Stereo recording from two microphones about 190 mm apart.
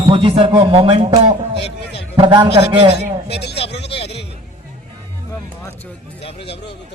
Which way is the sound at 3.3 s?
60° left (ahead or behind).